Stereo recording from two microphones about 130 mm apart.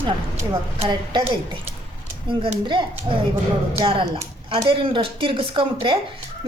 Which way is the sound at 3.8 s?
40° right (ahead or behind).